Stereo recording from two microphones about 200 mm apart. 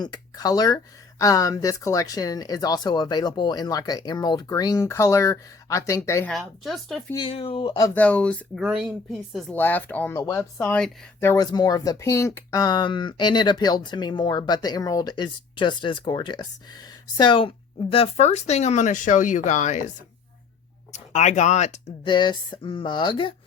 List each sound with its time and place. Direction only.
0.0 s speech: 20° left (ahead or behind)
6.3 s speech: centre (ahead or behind)
7.1 s speech: 25° left (ahead or behind)
8.0 s speech: 5° left (ahead or behind); by 19.8 s 35° left (ahead or behind)
20.9 s speech: 35° left (ahead or behind)
22.0 s speech: 25° left (ahead or behind)